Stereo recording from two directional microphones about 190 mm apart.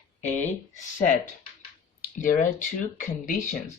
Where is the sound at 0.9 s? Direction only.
40° left (ahead or behind).